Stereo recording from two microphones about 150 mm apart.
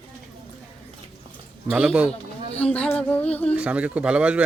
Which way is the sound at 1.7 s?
5° right (ahead or behind).